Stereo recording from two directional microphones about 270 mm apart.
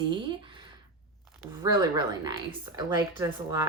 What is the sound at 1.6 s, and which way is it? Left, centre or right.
A woman's voice, centre.